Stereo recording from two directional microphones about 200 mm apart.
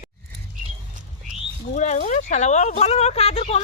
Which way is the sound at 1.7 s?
35° left (ahead or behind).